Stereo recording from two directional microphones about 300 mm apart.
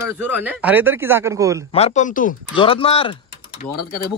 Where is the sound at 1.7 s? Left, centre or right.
Left.